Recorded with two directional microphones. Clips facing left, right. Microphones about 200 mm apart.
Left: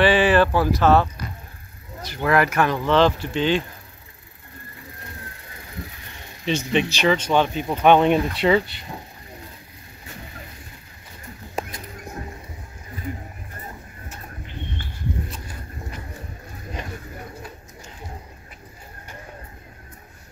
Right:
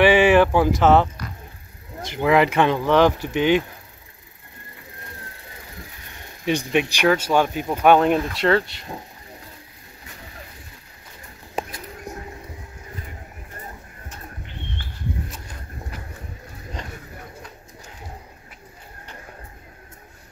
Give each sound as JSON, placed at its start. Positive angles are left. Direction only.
{"t": 0.0, "sound": "speech", "side_deg": -15}
{"t": 6.7, "sound": "speech", "side_deg": -10}